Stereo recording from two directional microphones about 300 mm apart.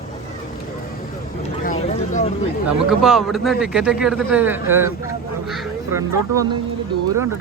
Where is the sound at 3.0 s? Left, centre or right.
Centre.